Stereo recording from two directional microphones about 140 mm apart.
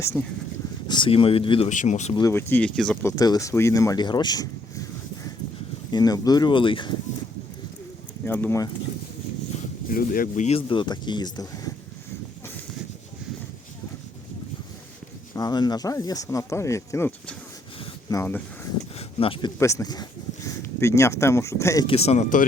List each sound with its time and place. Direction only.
0.0 s speech: 20° left (ahead or behind)
0.9 s speech: 35° left (ahead or behind)
1.7 s speech: 60° left (ahead or behind)
2.3 s speech: 10° left (ahead or behind)
3.0 s speech: 25° left (ahead or behind)
5.9 s speech: 30° left (ahead or behind)
8.2 s speech: 15° left (ahead or behind)
9.9 s speech: 90° left; by 10.6 s 60° left (ahead or behind)
10.7 s speech: 35° left (ahead or behind)
15.3 s speech: 25° left (ahead or behind)
18.9 s a sound: 40° left (ahead or behind)
19.5 s speech: 20° left (ahead or behind)
21.8 s speech: 45° left (ahead or behind)